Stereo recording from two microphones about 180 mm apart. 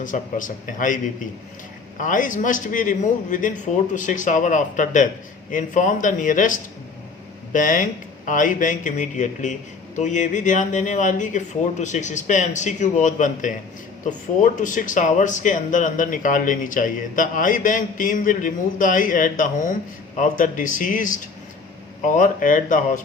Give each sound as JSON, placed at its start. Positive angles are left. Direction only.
{"t": 0.0, "sound": "speech", "side_deg": 45}
{"t": 2.0, "sound": "speech", "side_deg": 45}